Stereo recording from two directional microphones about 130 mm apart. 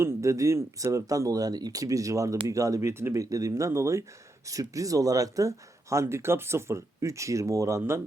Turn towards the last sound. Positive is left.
turn(degrees=-25)  # may be behind; listen again after turning